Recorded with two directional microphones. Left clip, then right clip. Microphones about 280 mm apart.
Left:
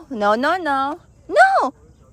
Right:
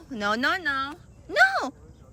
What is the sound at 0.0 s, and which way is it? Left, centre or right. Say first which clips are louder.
A woman's voice: left 8 dB; centre.